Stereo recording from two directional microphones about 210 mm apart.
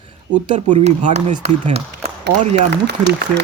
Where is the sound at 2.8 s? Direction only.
55° right (ahead or behind).